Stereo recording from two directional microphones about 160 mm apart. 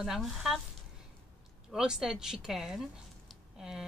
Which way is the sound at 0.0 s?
Centre (ahead or behind).